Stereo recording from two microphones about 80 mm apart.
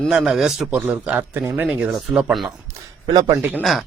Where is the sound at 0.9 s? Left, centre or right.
Centre.